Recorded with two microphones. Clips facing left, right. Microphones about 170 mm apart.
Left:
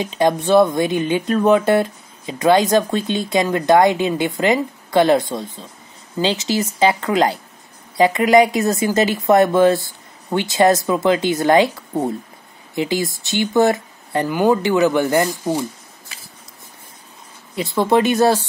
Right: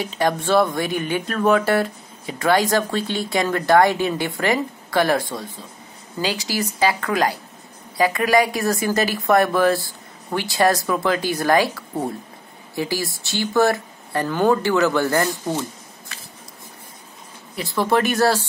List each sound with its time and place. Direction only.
0.0 s speech: 20° left (ahead or behind)
12.7 s speech: 20° left (ahead or behind)
17.6 s speech: 20° left (ahead or behind)